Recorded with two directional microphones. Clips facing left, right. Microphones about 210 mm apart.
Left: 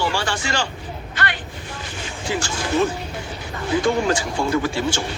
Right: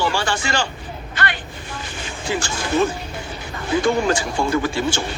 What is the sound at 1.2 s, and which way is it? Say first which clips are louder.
Vehicle: right 1 dB; 50° right (ahead or behind).